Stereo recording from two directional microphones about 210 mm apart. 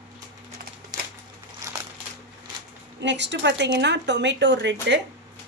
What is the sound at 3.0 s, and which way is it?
A woman's voice, 55° right (ahead or behind).